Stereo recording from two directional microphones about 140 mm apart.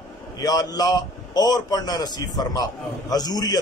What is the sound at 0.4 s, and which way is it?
A man's voice, 25° left (ahead or behind).